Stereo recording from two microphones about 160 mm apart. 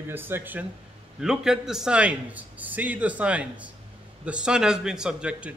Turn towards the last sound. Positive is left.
turn(degrees=-5)  # may be behind; listen again after turning